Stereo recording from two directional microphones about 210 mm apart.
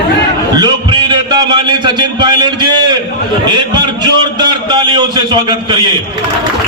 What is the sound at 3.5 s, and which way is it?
A man's voice, 20° right (ahead or behind).